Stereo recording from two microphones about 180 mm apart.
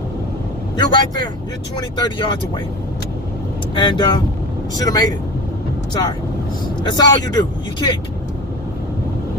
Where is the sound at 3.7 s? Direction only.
25° left (ahead or behind).